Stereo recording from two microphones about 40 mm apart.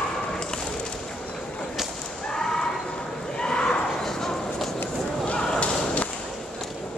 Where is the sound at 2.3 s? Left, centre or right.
Centre.